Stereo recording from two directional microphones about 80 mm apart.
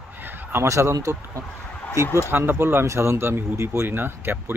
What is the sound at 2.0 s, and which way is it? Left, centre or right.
Speech, left.